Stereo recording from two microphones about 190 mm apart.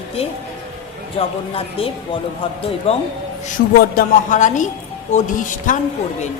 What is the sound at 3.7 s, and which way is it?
A woman's voice, 45° left (ahead or behind).